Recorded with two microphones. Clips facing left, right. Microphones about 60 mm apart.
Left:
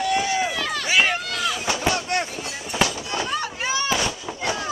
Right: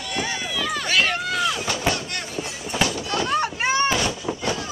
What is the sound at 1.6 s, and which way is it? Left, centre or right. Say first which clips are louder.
Vehicle: left 2 dB; left.